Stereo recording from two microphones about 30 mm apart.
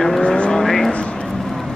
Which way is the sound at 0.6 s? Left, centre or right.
Centre.